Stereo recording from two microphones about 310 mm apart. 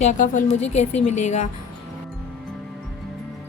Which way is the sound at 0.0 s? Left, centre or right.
Left.